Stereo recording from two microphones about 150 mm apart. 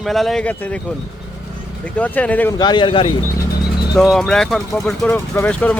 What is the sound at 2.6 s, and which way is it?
Speech, 30° left (ahead or behind).